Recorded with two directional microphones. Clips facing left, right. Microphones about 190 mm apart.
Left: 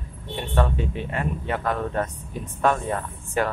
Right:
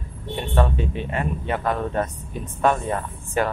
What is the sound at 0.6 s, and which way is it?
Speech, 20° right (ahead or behind).